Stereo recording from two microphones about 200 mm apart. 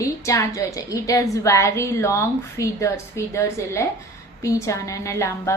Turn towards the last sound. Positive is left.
turn(degrees=15)  # may be behind; listen again after turning